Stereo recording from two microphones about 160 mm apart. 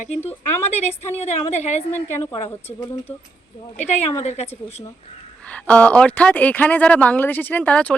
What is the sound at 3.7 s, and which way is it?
Speech, 45° left (ahead or behind).